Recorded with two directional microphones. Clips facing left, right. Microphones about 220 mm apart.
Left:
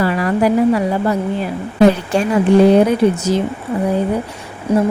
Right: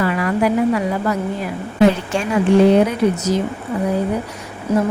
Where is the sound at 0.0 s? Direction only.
35° left (ahead or behind).